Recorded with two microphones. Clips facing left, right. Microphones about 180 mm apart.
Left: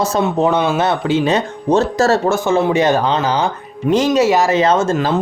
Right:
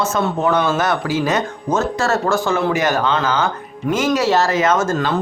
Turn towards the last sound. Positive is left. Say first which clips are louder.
# left 3 dB
turn(degrees=25)  # may be behind; listen again after turning